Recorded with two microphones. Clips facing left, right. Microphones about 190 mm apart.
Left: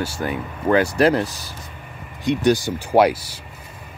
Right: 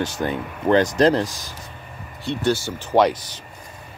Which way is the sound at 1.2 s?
15° right (ahead or behind).